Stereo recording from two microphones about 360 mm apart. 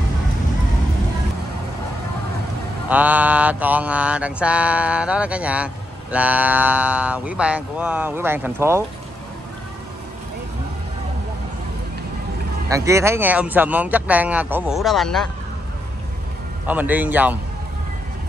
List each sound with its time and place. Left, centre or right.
2.9 s mantra: centre
12.6 s mantra: centre
16.6 s mantra: centre